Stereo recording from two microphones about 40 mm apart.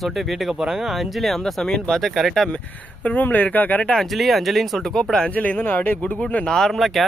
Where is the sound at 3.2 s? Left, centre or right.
Left.